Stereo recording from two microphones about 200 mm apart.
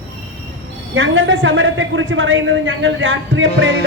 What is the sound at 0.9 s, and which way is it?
A man's voice, 70° right (ahead or behind).